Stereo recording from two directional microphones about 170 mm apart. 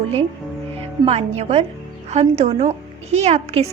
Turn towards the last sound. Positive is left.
turn(degrees=-40)  # may be behind; listen again after turning